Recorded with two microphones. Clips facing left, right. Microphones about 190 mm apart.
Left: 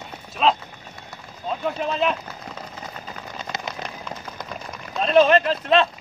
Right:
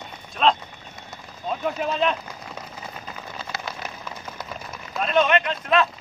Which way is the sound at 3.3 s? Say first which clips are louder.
Left 2 dB; 20° left (ahead or behind).